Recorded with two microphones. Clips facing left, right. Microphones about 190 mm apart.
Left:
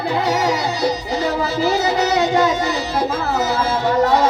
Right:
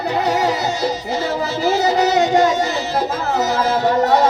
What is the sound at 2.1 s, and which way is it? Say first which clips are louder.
Music: right 2 dB; 45° right (ahead or behind).